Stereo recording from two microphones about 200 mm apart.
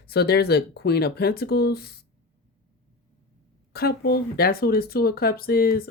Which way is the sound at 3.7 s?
50° left (ahead or behind).